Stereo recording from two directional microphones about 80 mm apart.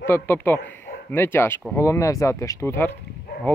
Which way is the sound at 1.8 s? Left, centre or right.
Left.